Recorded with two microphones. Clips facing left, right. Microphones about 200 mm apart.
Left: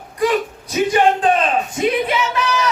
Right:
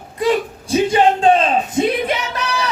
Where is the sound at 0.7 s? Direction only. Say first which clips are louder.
Right 1 dB; 25° right (ahead or behind).